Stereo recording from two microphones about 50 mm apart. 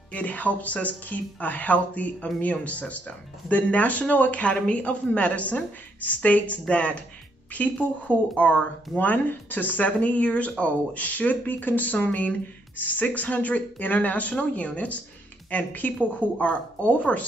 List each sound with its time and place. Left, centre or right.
0.1 s speech: left
8.9 s speech: left